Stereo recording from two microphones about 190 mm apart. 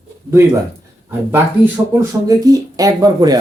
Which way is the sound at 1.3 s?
15° right (ahead or behind).